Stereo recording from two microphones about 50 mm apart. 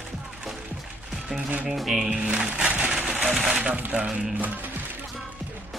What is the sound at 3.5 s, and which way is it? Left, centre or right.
Speech, right.